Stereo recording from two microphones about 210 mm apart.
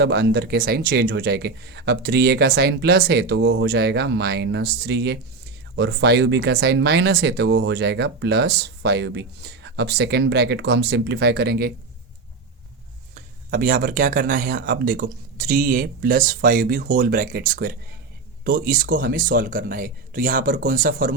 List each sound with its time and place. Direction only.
0.0 s speech: 50° right (ahead or behind)
13.1 s speech: 40° right (ahead or behind)